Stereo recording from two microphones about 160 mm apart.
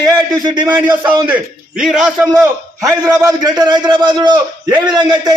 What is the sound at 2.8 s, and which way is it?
A man's voice, 20° right (ahead or behind).